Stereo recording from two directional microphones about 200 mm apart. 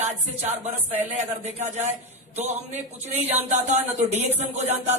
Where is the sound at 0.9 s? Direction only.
35° right (ahead or behind).